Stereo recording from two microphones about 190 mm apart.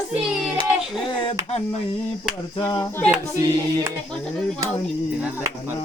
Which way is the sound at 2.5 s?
20° left (ahead or behind).